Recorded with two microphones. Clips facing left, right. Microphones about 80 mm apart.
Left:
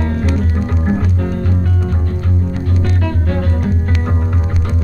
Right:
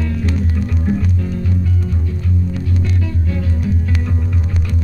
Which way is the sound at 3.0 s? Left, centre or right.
Left.